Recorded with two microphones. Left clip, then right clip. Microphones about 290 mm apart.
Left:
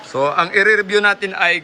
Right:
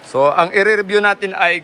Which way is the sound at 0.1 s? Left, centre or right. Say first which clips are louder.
Right 3 dB; centre.